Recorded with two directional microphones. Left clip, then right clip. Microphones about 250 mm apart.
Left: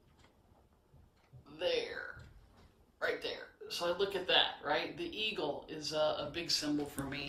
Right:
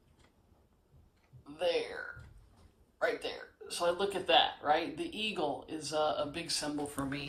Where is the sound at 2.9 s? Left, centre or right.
Right.